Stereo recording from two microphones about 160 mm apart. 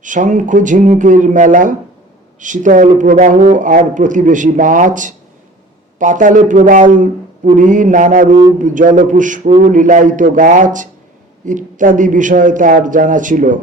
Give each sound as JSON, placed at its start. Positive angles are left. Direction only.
{"t": 0.0, "sound": "a man's voice", "side_deg": -50}